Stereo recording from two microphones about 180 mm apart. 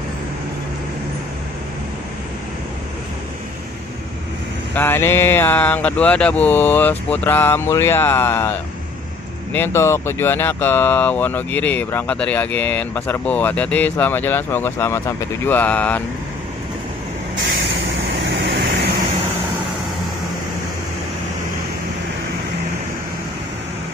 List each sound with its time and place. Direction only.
4.7 s speech: 10° left (ahead or behind)
18.2 s vehicle: 70° right (ahead or behind)